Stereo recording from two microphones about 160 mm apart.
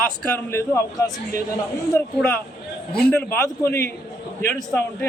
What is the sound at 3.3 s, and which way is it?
Speech, 15° left (ahead or behind).